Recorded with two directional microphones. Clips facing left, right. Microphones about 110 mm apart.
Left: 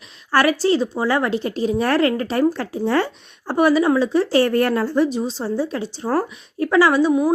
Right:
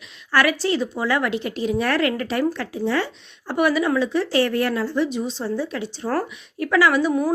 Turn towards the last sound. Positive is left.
turn(degrees=30)  # may be behind; listen again after turning